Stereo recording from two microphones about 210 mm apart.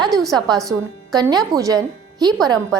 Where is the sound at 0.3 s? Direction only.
20° right (ahead or behind).